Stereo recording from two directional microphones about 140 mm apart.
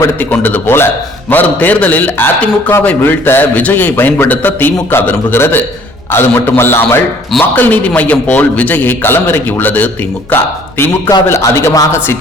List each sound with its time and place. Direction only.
0.0 s a man's voice: 15° left (ahead or behind)